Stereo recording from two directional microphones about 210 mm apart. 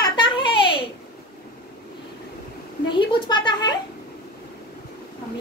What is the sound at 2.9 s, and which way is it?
Speech, 20° left (ahead or behind).